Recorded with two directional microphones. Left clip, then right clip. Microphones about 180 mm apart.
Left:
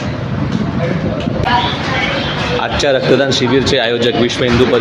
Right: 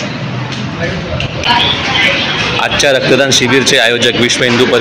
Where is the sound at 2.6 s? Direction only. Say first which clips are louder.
Right 3 dB; 5° left (ahead or behind).